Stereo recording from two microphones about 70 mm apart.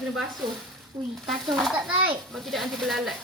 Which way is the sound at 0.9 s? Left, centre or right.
Right.